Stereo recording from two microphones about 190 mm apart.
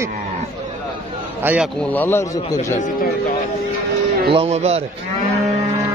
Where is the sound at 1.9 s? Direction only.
10° left (ahead or behind).